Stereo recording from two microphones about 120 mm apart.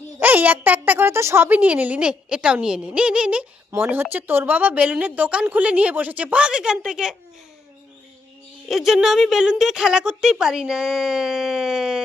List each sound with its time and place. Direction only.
0.2 s speech: 15° right (ahead or behind)
8.7 s speech: 5° right (ahead or behind)